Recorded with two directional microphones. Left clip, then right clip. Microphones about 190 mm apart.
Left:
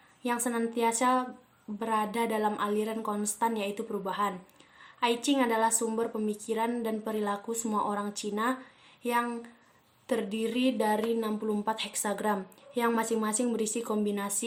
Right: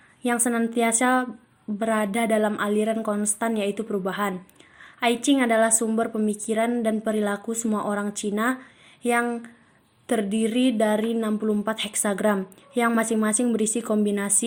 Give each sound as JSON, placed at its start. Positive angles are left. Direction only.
{"t": 0.2, "sound": "a woman's voice", "side_deg": -25}
{"t": 10.1, "sound": "a woman's voice", "side_deg": -20}